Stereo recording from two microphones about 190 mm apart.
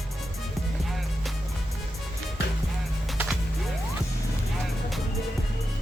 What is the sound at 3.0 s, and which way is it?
Skateboard, centre (ahead or behind).